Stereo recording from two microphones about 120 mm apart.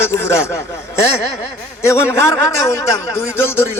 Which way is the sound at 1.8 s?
20° left (ahead or behind).